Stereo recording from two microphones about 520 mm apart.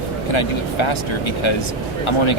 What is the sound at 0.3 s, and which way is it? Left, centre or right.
Speech, left.